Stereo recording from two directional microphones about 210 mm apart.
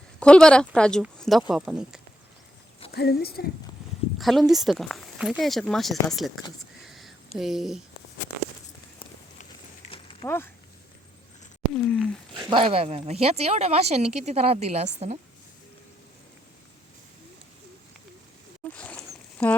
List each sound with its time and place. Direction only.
0.2 s speech: 5° left (ahead or behind)
2.9 s speech: 50° left (ahead or behind)
4.2 s speech: centre (ahead or behind)
6.8 s a sound: centre (ahead or behind)
7.3 s speech: centre (ahead or behind)
9.9 s a sound: 25° left (ahead or behind)
10.2 s speech: 10° left (ahead or behind)
11.7 s speech: 5° left (ahead or behind)
12.3 s speech: 20° right (ahead or behind)
18.6 s a sound: 5° left (ahead or behind)